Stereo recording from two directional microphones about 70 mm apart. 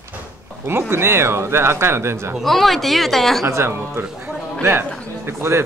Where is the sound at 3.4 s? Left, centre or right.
Right.